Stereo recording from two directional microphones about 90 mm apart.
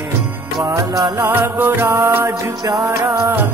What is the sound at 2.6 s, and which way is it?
Music, 45° right (ahead or behind).